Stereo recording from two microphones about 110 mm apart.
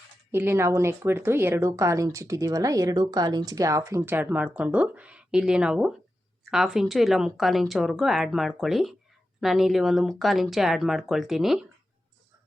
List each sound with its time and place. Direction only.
0.3 s speech: 20° right (ahead or behind); by 11.6 s 5° right (ahead or behind)